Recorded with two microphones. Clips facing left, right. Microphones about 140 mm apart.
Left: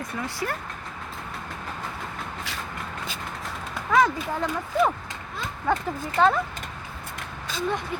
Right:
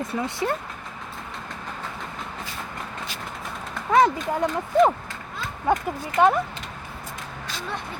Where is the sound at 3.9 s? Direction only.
25° right (ahead or behind).